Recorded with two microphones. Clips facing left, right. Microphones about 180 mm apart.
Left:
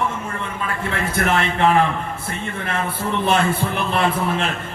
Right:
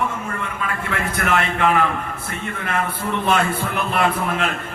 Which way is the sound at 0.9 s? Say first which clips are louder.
Left 1 dB; 25° left (ahead or behind).